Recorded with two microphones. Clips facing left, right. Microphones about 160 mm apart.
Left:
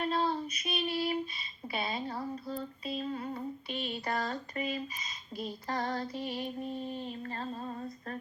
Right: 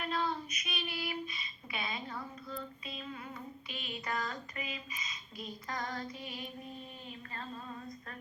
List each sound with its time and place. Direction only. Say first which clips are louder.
0.0 s female singing: left 5 dB; 30° left (ahead or behind)